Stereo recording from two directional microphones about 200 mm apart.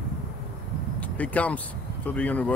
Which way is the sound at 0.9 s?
5° left (ahead or behind).